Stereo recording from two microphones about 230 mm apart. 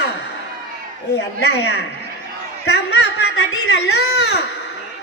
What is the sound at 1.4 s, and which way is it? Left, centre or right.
Speech, left.